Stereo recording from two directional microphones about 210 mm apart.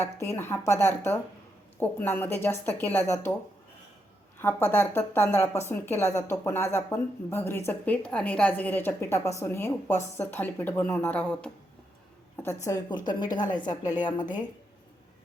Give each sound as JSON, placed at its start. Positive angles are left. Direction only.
{"t": 0.0, "sound": "speech", "side_deg": 10}
{"t": 4.4, "sound": "speech", "side_deg": 10}
{"t": 12.6, "sound": "speech", "side_deg": 15}